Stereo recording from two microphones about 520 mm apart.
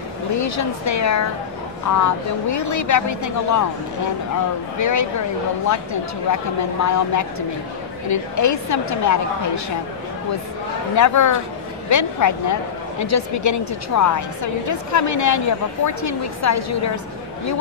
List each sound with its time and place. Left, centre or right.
0.4 s a woman's voice: left
4.7 s a woman's voice: left
6.3 s a woman's voice: left
11.0 s a woman's voice: left